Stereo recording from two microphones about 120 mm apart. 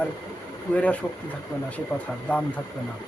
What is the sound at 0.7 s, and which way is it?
Speech, 10° left (ahead or behind).